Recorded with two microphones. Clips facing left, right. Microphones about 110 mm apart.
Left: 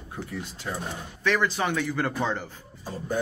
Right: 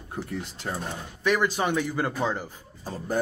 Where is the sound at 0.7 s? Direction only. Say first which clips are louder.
Right 1 dB; 45° right (ahead or behind).